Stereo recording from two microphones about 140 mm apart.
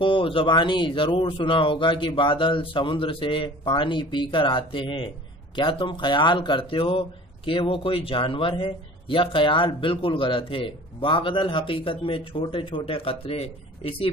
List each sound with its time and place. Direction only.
0.0 s speech: 40° left (ahead or behind)